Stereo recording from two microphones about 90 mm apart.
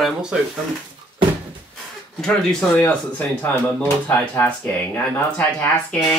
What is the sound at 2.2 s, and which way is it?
Speech, 15° left (ahead or behind).